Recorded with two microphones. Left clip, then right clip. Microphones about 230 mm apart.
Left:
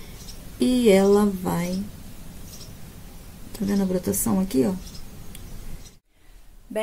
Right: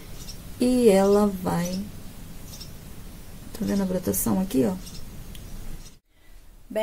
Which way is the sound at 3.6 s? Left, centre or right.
Centre.